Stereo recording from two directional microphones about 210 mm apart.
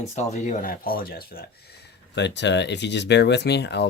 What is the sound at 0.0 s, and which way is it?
Speech, 30° left (ahead or behind).